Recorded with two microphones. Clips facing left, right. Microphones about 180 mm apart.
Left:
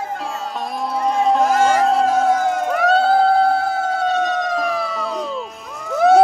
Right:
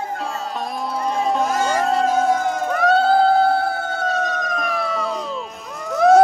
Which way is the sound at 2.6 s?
5° left (ahead or behind).